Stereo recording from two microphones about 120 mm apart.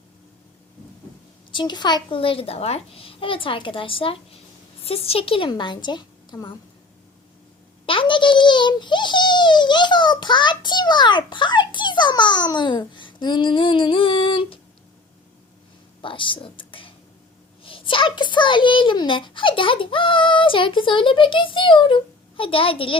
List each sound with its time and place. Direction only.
1.5 s a child's voice: 40° left (ahead or behind)
7.9 s a sound: 45° left (ahead or behind)
11.3 s a child's voice: 40° left (ahead or behind)
16.0 s a child's voice: 45° left (ahead or behind)